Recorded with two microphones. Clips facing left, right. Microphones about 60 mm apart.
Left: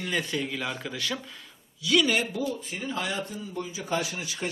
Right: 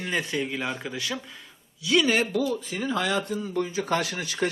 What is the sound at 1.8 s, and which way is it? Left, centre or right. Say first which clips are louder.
Speech: right 1 dB; right.